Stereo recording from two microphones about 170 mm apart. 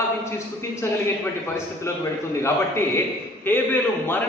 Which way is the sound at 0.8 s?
15° left (ahead or behind).